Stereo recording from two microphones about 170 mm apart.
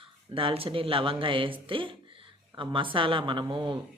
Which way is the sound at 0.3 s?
35° right (ahead or behind).